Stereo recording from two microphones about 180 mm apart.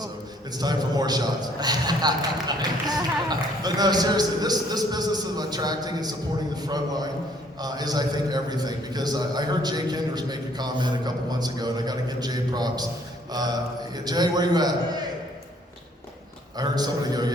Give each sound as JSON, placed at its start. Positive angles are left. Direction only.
{"t": 0.5, "sound": "a man's voice", "side_deg": -20}
{"t": 16.6, "sound": "a man's voice", "side_deg": -20}